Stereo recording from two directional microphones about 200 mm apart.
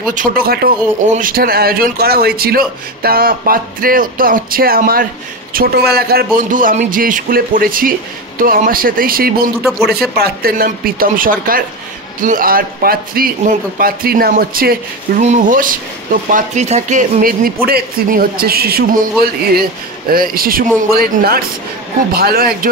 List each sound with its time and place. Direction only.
0.1 s speech: 45° right (ahead or behind)
9.6 s speech: centre (ahead or behind)
9.8 s speech: 50° right (ahead or behind)
20.1 s speech: 45° right (ahead or behind)